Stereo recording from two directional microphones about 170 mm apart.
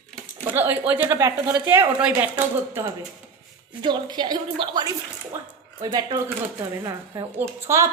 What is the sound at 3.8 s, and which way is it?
A woman's voice, 25° right (ahead or behind).